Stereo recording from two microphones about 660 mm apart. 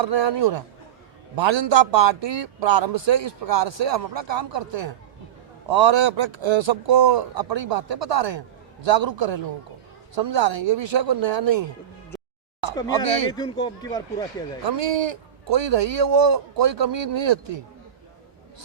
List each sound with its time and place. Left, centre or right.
0.0 s a man's voice: right
13.3 s speech: centre
14.6 s a man's voice: right